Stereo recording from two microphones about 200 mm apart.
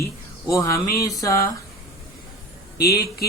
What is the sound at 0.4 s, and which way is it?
Speech, 15° left (ahead or behind).